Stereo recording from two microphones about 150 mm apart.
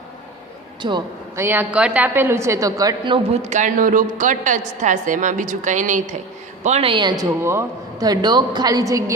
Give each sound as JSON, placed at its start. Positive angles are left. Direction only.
{"t": 0.8, "sound": "a man's voice", "side_deg": -30}
{"t": 1.4, "sound": "a woman's voice", "side_deg": -15}
{"t": 3.4, "sound": "a woman's voice", "side_deg": -55}
{"t": 7.4, "sound": "a woman's voice", "side_deg": -20}